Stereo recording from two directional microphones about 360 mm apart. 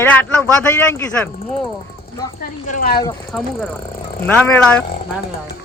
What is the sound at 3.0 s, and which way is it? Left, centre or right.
Speech, centre.